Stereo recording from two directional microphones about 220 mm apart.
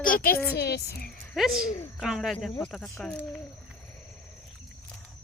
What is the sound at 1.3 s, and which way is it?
Speech, centre (ahead or behind).